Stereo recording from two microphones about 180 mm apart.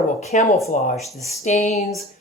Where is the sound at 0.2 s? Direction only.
40° left (ahead or behind).